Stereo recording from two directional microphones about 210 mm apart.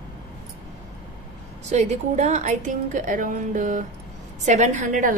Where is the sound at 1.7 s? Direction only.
35° right (ahead or behind).